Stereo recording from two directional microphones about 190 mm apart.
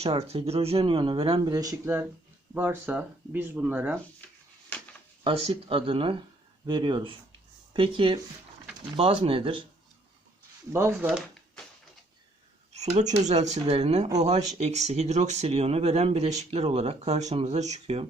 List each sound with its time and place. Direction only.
0.0 s speech: 35° right (ahead or behind); by 3.9 s 10° right (ahead or behind)
4.2 s a sound: 10° left (ahead or behind)
5.2 s speech: 30° right (ahead or behind)
10.7 s speech: 15° right (ahead or behind)
12.7 s speech: 35° right (ahead or behind)